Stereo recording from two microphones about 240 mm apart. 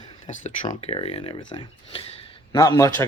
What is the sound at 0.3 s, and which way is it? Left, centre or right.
Speech, left.